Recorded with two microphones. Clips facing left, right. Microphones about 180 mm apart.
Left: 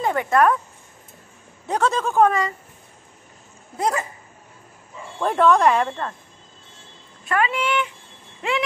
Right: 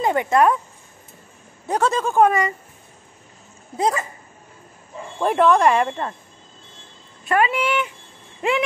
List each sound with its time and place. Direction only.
0.0 s speech: 15° right (ahead or behind)
1.7 s a woman's voice: centre (ahead or behind)
5.2 s speech: 5° right (ahead or behind)
7.2 s speech: 20° right (ahead or behind)